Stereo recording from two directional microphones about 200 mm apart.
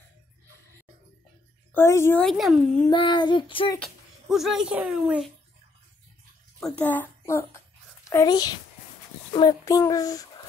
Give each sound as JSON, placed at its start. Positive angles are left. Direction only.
{"t": 1.7, "sound": "a woman's voice", "side_deg": 15}
{"t": 2.9, "sound": "child singing", "side_deg": 25}
{"t": 3.8, "sound": "speech", "side_deg": 0}
{"t": 6.6, "sound": "a woman's voice", "side_deg": 5}
{"t": 8.1, "sound": "child singing", "side_deg": 15}
{"t": 9.3, "sound": "a child's voice", "side_deg": 20}